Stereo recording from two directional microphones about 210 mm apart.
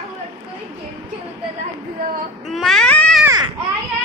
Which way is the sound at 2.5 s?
Centre (ahead or behind).